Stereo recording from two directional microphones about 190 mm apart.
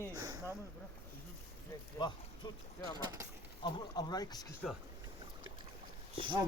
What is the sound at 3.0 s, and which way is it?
Speech, 15° right (ahead or behind).